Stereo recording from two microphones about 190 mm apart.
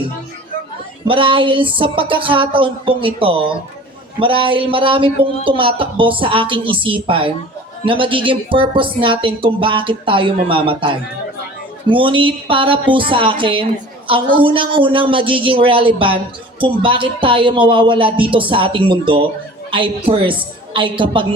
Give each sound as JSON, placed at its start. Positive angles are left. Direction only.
{"t": 1.0, "sound": "speech", "side_deg": -25}